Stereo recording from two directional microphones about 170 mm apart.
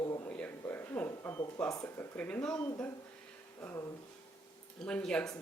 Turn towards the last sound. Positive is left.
turn(degrees=5)  # may be behind; listen again after turning